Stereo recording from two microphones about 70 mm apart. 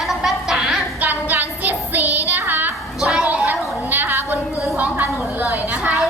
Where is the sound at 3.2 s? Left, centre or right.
Right.